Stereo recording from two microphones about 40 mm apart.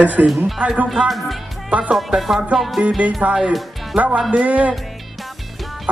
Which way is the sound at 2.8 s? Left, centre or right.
Right.